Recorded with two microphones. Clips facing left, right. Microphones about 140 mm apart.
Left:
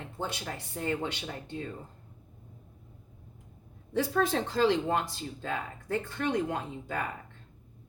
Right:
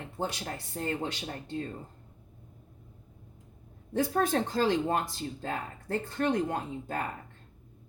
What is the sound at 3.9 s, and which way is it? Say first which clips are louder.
Speech: right 1 dB; 45° right (ahead or behind).